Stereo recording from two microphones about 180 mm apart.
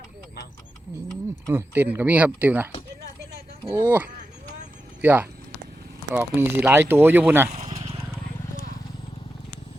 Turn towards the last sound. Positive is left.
turn(degrees=-40)  # may be behind; listen again after turning